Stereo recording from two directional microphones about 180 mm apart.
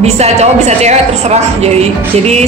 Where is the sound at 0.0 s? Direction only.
35° right (ahead or behind).